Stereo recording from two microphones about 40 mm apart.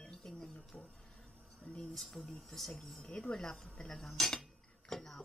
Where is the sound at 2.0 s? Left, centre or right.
Centre.